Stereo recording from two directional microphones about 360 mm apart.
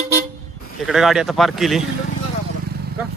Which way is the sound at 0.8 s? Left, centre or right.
Centre.